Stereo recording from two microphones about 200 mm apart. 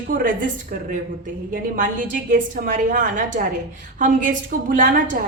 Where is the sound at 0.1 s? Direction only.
45° right (ahead or behind).